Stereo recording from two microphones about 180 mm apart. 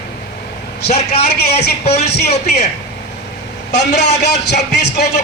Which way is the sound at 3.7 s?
70° left (ahead or behind).